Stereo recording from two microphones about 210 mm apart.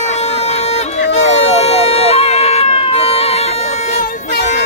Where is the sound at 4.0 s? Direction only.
50° left (ahead or behind).